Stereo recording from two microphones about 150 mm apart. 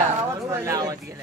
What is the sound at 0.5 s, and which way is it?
Speech, 20° right (ahead or behind).